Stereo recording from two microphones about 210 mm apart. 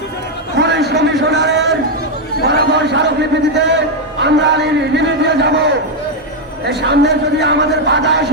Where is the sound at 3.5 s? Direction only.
55° right (ahead or behind).